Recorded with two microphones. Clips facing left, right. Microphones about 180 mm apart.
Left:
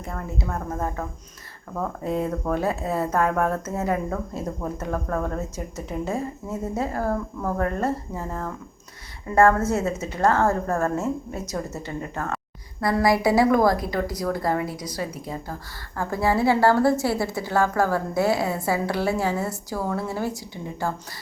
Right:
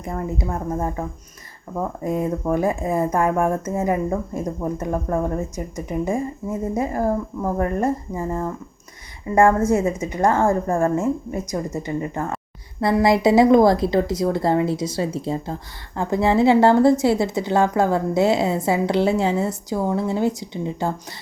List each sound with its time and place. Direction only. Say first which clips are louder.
0.0 s a woman's voice: right 5 dB; 20° right (ahead or behind)